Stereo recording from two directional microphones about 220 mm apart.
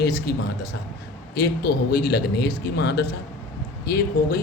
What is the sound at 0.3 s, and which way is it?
Speech, 50° left (ahead or behind).